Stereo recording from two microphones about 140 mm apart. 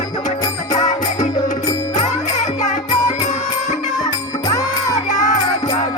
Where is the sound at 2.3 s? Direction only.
60° left (ahead or behind).